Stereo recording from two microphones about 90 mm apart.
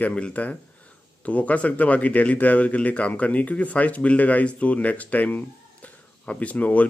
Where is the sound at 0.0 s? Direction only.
15° left (ahead or behind).